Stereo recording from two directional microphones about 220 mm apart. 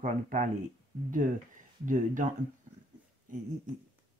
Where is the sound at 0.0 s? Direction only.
35° right (ahead or behind).